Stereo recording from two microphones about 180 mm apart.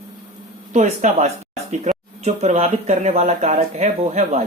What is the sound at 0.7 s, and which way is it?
Speech, 40° right (ahead or behind).